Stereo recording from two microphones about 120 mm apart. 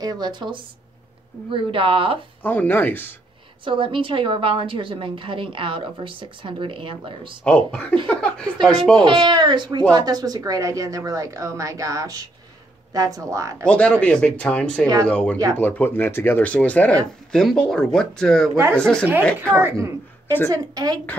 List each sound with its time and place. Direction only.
0.0 s a woman's voice: 35° right (ahead or behind)
2.4 s speech: 15° left (ahead or behind)
3.6 s a woman's voice: 45° right (ahead or behind)
7.4 s speech: 10° left (ahead or behind)
9.3 s speech: 40° right (ahead or behind)
13.7 s speech: 10° left (ahead or behind)
19.5 s a woman's voice: 20° right (ahead or behind)